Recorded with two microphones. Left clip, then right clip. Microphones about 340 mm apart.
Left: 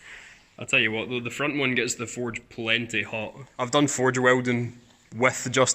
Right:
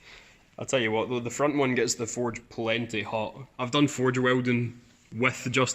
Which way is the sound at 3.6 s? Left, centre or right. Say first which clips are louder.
Left 3 dB; centre.